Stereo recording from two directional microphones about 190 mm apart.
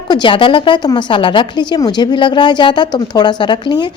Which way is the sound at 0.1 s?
25° left (ahead or behind).